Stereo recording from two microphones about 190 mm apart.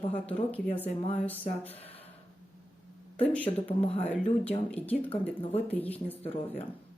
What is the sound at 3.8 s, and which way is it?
Speech, 30° left (ahead or behind).